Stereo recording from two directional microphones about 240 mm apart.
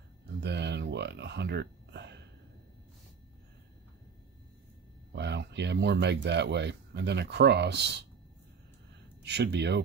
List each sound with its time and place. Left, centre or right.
0.4 s a sound: right
5.1 s speech: right
9.2 s speech: right